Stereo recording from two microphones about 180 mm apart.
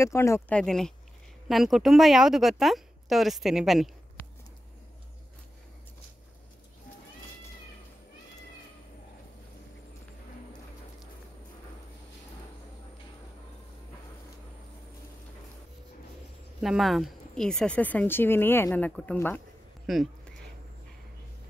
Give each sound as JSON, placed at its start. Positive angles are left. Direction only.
{"t": 0.0, "sound": "speech", "side_deg": 15}
{"t": 0.6, "sound": "a woman's voice", "side_deg": 5}
{"t": 16.6, "sound": "speech", "side_deg": 0}
{"t": 19.9, "sound": "a sound", "side_deg": 0}